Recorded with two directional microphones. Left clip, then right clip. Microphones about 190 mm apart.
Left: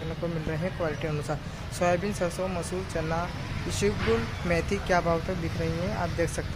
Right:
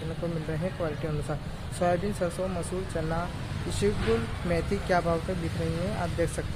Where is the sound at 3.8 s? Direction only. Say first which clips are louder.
Left 1 dB; 10° left (ahead or behind).